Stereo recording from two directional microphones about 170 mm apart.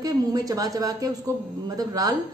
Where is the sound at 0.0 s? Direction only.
20° right (ahead or behind).